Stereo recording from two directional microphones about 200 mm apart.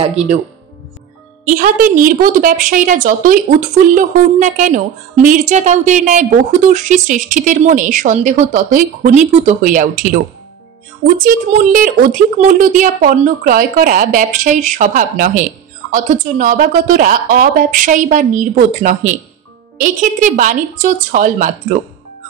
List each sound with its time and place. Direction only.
0.0 s a woman's voice: 30° right (ahead or behind)
1.5 s a woman's voice: 45° right (ahead or behind)
11.2 s a woman's voice: 40° right (ahead or behind)